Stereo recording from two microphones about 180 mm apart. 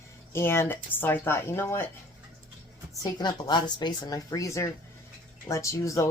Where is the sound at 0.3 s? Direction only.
15° left (ahead or behind).